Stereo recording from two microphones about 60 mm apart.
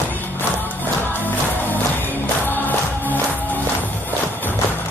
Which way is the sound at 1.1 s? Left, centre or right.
Left.